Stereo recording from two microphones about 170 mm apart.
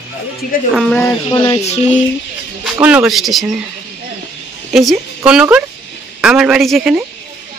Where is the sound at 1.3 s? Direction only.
25° left (ahead or behind).